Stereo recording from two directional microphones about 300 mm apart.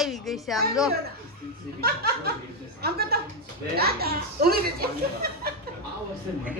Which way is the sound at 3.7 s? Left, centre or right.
Right.